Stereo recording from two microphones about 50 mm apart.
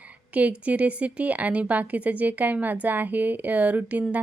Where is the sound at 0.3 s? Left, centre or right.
Right.